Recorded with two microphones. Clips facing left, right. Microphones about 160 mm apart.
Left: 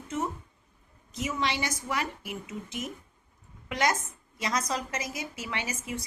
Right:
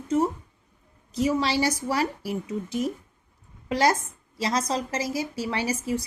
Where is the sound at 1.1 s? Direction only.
35° right (ahead or behind).